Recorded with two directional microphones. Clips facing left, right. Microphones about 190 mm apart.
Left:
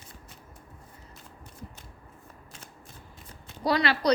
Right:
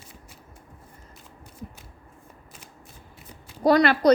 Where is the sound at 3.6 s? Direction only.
50° right (ahead or behind).